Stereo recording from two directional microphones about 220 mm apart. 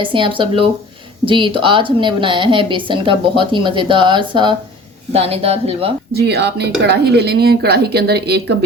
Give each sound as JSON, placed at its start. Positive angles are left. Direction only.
{"t": 0.0, "sound": "a woman's voice", "side_deg": -20}
{"t": 6.1, "sound": "speech", "side_deg": -50}